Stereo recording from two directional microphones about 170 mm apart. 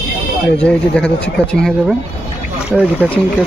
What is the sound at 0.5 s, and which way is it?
Speech, 5° left (ahead or behind).